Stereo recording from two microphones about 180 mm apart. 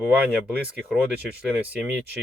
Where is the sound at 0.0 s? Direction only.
5° right (ahead or behind).